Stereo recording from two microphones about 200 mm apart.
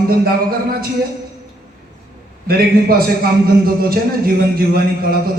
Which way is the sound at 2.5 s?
50° right (ahead or behind).